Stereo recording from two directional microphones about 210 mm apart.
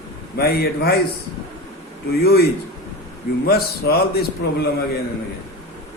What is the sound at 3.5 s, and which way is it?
A man's voice, 50° left (ahead or behind).